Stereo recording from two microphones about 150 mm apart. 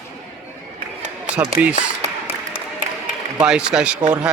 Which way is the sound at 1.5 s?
45° right (ahead or behind).